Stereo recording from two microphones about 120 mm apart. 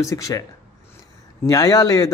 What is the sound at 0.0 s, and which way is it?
Speech, 25° left (ahead or behind).